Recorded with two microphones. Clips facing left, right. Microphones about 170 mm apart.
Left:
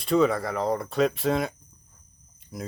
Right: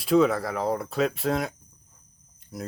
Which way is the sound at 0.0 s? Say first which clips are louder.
Right 1 dB; centre (ahead or behind).